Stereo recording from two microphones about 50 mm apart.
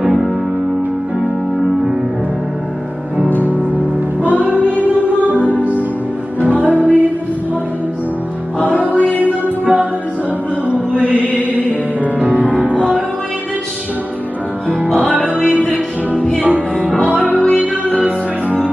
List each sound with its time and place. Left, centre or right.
3.4 s music: right
5.4 s music: left
6.6 s music: right
9.2 s music: right
11.1 s chant: right
11.5 s music: right
16.1 s music: left